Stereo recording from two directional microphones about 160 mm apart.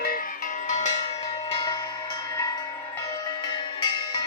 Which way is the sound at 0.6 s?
50° left (ahead or behind).